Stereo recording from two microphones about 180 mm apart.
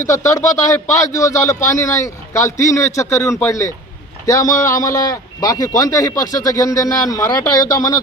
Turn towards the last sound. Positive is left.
turn(degrees=20)  # may be behind; listen again after turning